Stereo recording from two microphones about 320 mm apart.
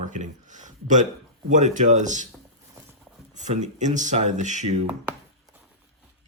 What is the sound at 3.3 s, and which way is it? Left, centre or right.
Speech, right.